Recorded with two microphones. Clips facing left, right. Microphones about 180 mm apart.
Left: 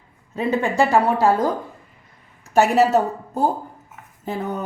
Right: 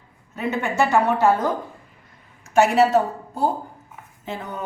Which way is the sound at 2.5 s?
40° left (ahead or behind).